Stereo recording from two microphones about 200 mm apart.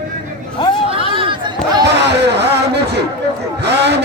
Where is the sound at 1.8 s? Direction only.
60° right (ahead or behind).